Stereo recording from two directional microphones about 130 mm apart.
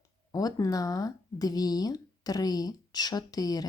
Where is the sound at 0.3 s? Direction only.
30° left (ahead or behind).